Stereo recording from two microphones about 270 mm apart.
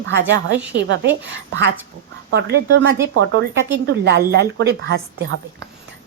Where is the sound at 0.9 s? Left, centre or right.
Right.